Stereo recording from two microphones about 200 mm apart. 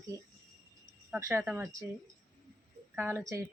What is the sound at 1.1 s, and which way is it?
Speech, 15° right (ahead or behind).